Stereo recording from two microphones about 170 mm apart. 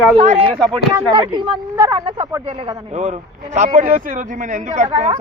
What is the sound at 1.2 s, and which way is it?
Speech, 25° right (ahead or behind).